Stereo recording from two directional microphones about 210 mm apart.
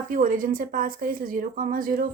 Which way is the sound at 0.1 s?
40° right (ahead or behind).